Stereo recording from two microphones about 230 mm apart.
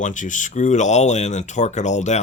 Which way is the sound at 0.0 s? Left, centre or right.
Left.